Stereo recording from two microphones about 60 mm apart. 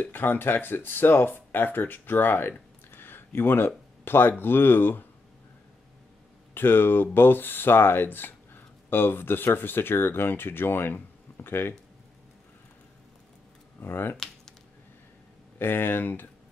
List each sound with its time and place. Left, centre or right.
0.0 s speech: left
6.5 s speech: left
13.7 s speech: left
14.1 s a sound: centre
15.6 s speech: left